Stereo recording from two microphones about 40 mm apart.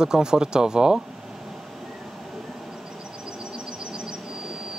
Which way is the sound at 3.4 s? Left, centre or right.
Right.